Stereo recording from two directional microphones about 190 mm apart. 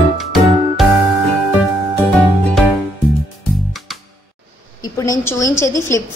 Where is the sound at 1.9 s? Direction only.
Centre (ahead or behind).